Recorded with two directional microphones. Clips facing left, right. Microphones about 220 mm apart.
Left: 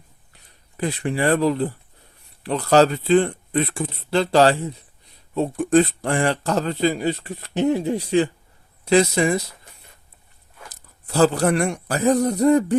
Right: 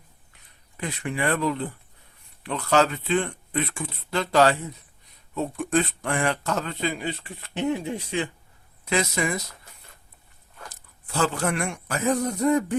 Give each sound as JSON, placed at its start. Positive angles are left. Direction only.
{"t": 0.8, "sound": "a man's voice", "side_deg": 35}
{"t": 10.7, "sound": "speech", "side_deg": 35}